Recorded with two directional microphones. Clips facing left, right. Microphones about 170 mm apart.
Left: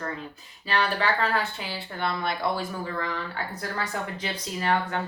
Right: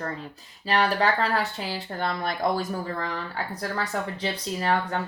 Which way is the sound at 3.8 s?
35° right (ahead or behind).